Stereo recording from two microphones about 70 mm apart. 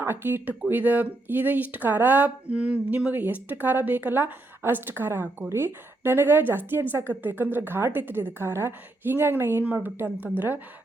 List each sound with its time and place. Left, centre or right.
0.0 s a woman's voice: right